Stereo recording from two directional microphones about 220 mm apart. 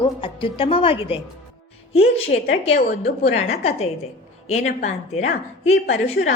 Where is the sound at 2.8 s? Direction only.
45° left (ahead or behind).